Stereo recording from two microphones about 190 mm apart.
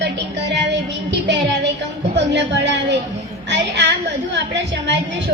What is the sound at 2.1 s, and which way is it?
Speech, 65° right (ahead or behind).